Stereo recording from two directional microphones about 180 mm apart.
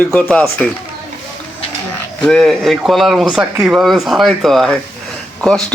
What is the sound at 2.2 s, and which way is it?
Speech, 5° left (ahead or behind).